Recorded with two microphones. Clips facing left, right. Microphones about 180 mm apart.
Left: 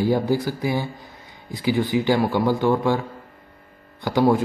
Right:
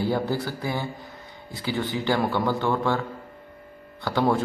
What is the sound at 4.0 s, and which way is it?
Speech, 15° left (ahead or behind).